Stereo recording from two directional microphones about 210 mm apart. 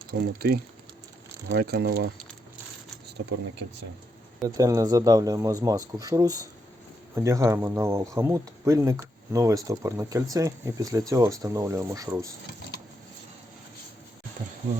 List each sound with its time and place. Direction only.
0.1 s speech: 50° right (ahead or behind)
4.4 s speech: 15° right (ahead or behind)